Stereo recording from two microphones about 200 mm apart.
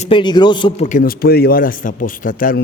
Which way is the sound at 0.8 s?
45° left (ahead or behind).